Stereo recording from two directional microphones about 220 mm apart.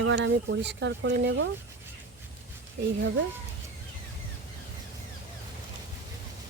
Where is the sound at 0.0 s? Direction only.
60° right (ahead or behind).